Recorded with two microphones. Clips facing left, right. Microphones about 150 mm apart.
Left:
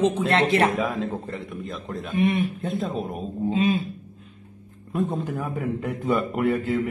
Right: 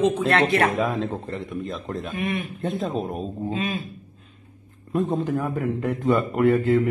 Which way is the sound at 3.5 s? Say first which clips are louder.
Left 7 dB; 25° left (ahead or behind).